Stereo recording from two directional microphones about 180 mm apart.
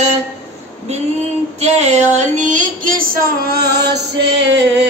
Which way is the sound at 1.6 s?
35° right (ahead or behind).